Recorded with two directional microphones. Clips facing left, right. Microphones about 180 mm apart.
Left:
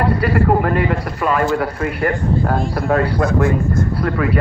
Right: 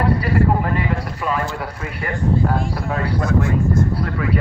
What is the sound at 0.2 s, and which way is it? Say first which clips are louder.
Speech: left 3 dB; 60° left (ahead or behind).